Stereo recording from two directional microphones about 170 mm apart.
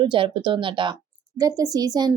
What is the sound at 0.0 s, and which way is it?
A woman's voice, 30° right (ahead or behind).